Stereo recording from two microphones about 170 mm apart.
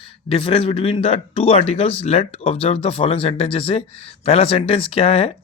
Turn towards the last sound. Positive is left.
turn(degrees=30)  # may be behind; listen again after turning